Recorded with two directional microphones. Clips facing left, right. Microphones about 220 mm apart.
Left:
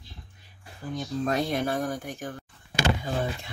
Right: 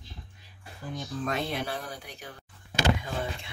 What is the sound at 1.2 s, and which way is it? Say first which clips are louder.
Speech: left 5 dB; 40° left (ahead or behind).